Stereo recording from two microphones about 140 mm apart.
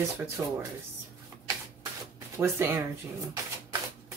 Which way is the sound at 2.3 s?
15° right (ahead or behind).